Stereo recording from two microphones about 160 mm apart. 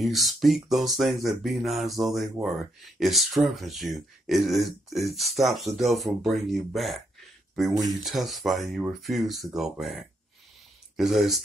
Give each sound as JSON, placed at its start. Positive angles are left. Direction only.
{"t": 0.0, "sound": "speech", "side_deg": 0}
{"t": 7.7, "sound": "speech", "side_deg": -25}
{"t": 8.0, "sound": "speech", "side_deg": 0}